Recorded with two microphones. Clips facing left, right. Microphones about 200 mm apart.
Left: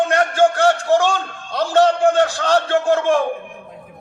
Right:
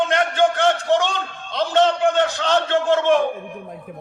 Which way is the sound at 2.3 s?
20° right (ahead or behind).